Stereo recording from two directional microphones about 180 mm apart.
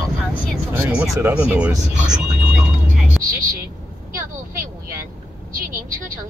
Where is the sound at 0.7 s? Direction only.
5° right (ahead or behind).